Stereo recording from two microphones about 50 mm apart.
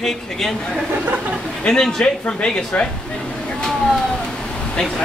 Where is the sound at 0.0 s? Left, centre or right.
Centre.